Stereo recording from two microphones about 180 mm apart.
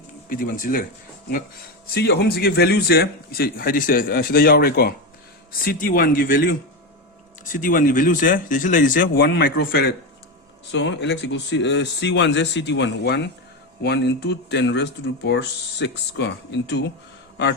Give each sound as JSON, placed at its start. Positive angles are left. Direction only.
{"t": 0.3, "sound": "speech", "side_deg": 50}
{"t": 1.9, "sound": "a man's voice", "side_deg": 65}
{"t": 10.7, "sound": "speech", "side_deg": 85}